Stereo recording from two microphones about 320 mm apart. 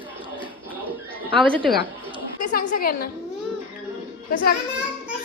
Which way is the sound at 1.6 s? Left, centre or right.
Centre.